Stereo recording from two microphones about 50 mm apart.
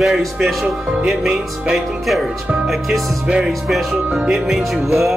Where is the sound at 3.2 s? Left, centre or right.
Centre.